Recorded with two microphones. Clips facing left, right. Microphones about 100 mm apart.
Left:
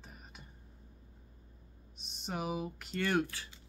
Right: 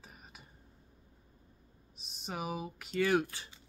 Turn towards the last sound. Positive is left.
turn(degrees=-5)  # may be behind; listen again after turning